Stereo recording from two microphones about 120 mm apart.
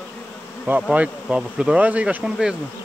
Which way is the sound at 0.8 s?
10° right (ahead or behind).